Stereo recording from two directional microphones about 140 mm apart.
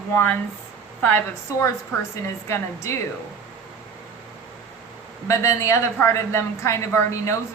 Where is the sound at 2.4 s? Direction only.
20° left (ahead or behind).